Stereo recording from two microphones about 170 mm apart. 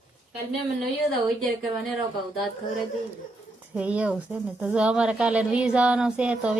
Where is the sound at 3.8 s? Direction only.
10° right (ahead or behind).